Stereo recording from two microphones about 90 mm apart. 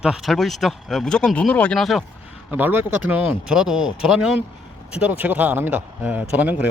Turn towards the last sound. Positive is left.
turn(degrees=-15)  # may be behind; listen again after turning